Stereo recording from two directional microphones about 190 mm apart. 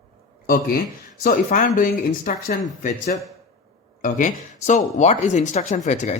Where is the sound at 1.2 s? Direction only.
45° left (ahead or behind).